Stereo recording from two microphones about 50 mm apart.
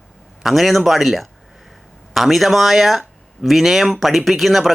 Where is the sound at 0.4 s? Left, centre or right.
Centre.